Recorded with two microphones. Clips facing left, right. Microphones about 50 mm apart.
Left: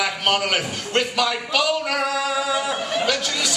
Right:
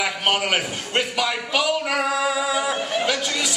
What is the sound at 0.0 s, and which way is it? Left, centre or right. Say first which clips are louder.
A man's voice: left 1 dB; centre.